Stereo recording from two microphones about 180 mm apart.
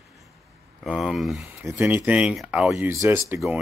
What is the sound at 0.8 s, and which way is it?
Speech, centre (ahead or behind).